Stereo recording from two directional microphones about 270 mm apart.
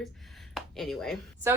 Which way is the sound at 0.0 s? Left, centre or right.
Centre.